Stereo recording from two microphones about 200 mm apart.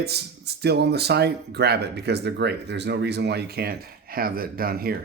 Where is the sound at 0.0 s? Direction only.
55° right (ahead or behind).